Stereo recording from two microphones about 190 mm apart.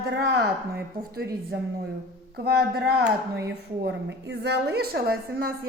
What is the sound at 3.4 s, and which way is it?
A woman's voice, 65° right (ahead or behind).